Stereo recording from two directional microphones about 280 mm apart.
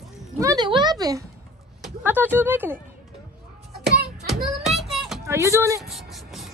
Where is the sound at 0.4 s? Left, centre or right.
Centre.